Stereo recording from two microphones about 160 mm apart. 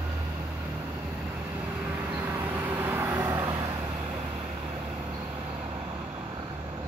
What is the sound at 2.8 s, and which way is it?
Vehicle, 15° right (ahead or behind).